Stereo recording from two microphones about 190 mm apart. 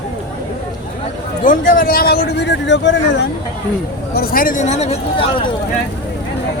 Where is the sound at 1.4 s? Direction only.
45° left (ahead or behind).